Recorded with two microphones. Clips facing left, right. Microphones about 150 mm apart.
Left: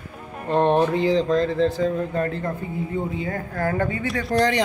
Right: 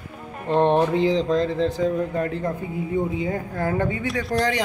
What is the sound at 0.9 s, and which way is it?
Speech, 20° right (ahead or behind).